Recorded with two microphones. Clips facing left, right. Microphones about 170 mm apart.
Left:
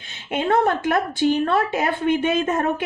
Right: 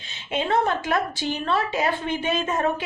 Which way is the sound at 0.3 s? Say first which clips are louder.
Left 3 dB; 55° left (ahead or behind).